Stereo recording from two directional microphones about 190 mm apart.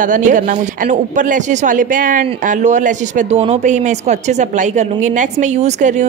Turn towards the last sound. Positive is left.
turn(degrees=-40)  # may be behind; listen again after turning